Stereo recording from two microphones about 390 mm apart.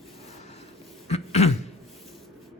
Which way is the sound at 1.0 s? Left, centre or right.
Centre.